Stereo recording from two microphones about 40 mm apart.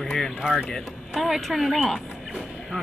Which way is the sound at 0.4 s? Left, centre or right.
Centre.